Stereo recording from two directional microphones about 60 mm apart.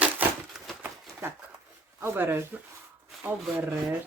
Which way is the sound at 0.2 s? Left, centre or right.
Right.